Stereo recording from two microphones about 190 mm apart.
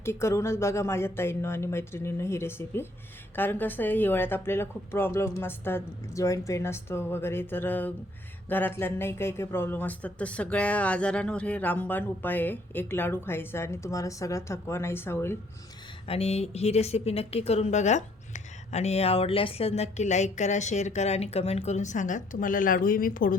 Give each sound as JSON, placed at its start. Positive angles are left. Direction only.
{"t": 0.0, "sound": "speech", "side_deg": 15}
{"t": 16.0, "sound": "speech", "side_deg": 30}